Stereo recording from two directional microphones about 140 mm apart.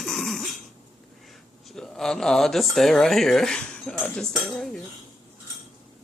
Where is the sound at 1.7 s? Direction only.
5° left (ahead or behind).